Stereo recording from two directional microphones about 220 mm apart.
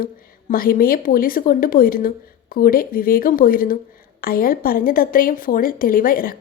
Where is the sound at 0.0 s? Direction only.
40° left (ahead or behind).